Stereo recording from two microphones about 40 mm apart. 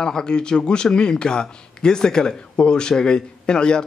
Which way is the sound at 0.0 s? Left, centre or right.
Centre.